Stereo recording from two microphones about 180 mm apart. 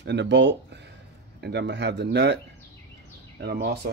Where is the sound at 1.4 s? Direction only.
70° right (ahead or behind).